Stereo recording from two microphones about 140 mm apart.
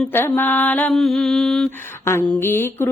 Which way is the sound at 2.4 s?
15° left (ahead or behind).